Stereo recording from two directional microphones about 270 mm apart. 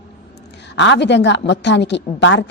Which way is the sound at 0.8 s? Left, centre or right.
Left.